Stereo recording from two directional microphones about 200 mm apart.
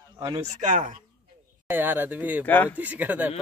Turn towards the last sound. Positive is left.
turn(degrees=-10)  # may be behind; listen again after turning